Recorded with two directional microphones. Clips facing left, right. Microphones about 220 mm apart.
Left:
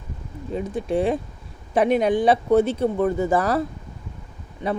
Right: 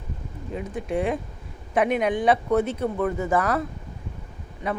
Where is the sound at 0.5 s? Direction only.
30° left (ahead or behind).